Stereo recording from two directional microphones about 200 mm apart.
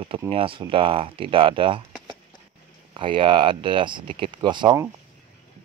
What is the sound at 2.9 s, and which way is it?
Speech, 25° right (ahead or behind).